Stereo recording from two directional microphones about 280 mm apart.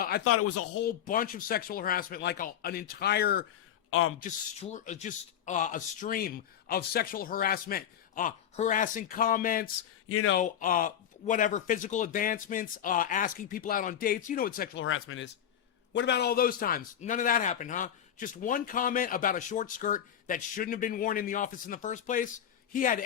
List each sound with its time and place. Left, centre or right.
0.3 s speech: left
0.9 s speech: left
3.8 s speech: left
4.2 s a man's voice: left
10.1 s speech: left
10.3 s a man's voice: left
14.8 s a man's voice: left